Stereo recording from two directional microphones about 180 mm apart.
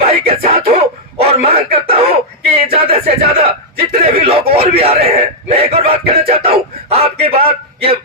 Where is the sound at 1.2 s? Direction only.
35° right (ahead or behind).